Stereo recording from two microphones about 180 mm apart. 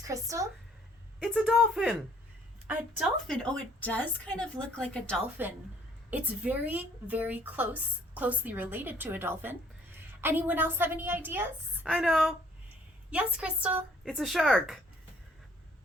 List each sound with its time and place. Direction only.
0.1 s a woman's voice: 15° right (ahead or behind)
1.2 s a woman's voice: 5° right (ahead or behind)
6.1 s a woman's voice: 10° right (ahead or behind)